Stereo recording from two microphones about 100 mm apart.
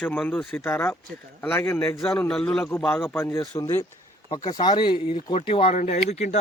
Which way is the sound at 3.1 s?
20° left (ahead or behind).